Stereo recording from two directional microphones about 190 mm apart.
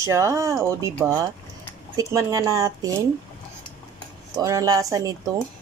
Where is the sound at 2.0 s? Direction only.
15° right (ahead or behind).